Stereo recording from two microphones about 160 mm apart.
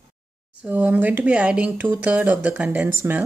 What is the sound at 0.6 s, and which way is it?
Speech, 10° right (ahead or behind).